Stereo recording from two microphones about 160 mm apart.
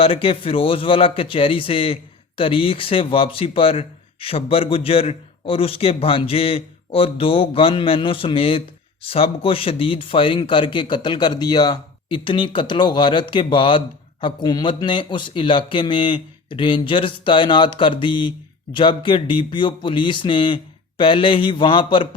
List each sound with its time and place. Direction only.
0.0 s a man's voice: 35° left (ahead or behind)